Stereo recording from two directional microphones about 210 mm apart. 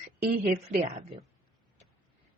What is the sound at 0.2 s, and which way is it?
Speech, 45° right (ahead or behind).